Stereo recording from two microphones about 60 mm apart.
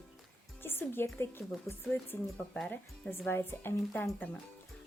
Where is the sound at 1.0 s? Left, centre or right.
Left.